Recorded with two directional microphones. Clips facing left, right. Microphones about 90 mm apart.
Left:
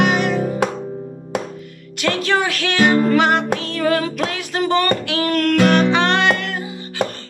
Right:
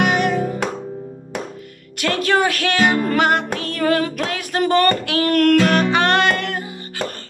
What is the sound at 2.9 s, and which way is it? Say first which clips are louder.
Music: left 4 dB; 20° left (ahead or behind).